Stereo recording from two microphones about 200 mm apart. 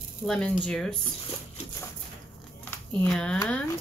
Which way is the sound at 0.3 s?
5° left (ahead or behind).